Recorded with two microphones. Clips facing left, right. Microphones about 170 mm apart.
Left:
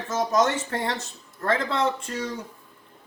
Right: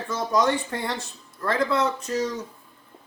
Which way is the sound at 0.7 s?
50° left (ahead or behind).